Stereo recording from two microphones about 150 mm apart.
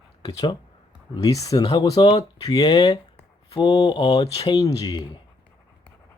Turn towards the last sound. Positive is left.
turn(degrees=25)  # may be behind; listen again after turning